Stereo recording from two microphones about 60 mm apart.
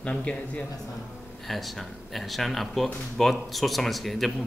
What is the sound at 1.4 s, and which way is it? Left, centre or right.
Speech, centre.